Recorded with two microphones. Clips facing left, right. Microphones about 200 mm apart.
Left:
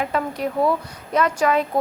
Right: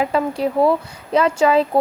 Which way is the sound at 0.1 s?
30° right (ahead or behind).